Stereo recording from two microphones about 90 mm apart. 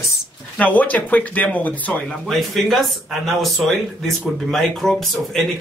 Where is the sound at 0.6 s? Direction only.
15° left (ahead or behind).